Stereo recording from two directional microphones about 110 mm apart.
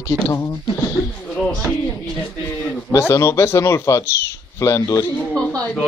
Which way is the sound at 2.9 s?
25° left (ahead or behind).